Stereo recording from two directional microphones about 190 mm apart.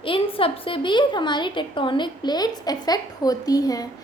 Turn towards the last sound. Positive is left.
turn(degrees=20)  # may be behind; listen again after turning